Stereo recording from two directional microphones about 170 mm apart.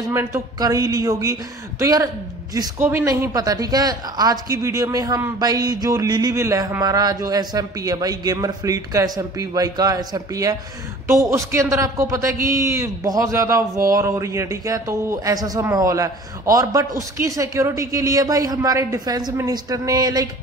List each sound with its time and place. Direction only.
0.0 s a man's voice: 15° right (ahead or behind)